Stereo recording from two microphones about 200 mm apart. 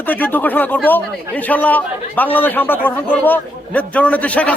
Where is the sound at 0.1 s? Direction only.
10° left (ahead or behind).